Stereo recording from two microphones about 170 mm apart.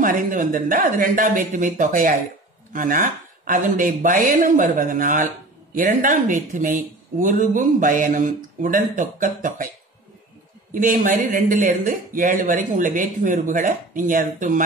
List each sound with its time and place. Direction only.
0.0 s speech: 50° right (ahead or behind)
10.7 s speech: 50° right (ahead or behind)